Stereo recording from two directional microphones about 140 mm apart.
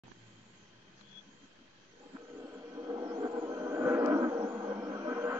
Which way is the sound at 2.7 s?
20° right (ahead or behind).